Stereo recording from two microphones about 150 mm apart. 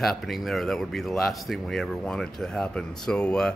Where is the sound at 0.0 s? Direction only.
Centre (ahead or behind).